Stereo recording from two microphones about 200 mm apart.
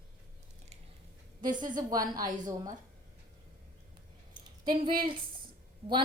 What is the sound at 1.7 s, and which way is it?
Speech, 20° right (ahead or behind).